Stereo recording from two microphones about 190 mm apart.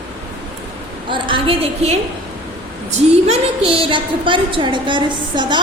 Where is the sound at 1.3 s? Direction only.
30° right (ahead or behind).